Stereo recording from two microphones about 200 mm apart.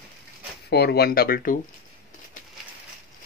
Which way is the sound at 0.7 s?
55° left (ahead or behind).